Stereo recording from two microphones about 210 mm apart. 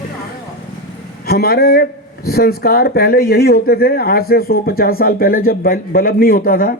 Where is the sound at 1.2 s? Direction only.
45° left (ahead or behind).